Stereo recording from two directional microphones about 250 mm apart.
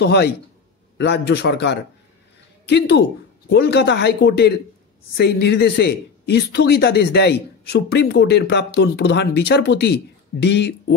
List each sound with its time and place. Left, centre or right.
0.0 s a man's voice: left